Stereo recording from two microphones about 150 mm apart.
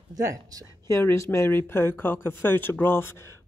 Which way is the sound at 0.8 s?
20° left (ahead or behind).